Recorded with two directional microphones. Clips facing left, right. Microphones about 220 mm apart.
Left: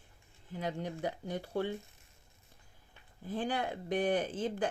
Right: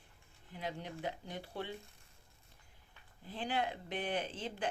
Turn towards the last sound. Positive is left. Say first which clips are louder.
# left 6 dB
turn(degrees=45)  # may be behind; listen again after turning